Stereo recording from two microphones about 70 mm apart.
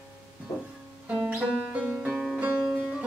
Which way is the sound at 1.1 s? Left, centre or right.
Centre.